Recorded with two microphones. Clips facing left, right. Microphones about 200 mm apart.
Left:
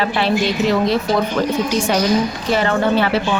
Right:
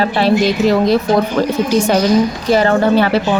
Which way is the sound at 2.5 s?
40° right (ahead or behind).